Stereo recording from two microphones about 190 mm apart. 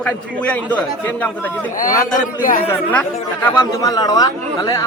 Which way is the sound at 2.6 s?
10° left (ahead or behind).